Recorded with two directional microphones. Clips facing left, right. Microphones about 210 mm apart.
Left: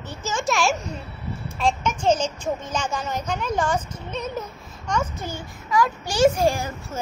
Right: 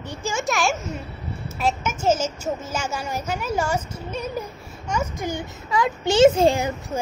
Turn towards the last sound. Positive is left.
turn(degrees=-20)  # may be behind; listen again after turning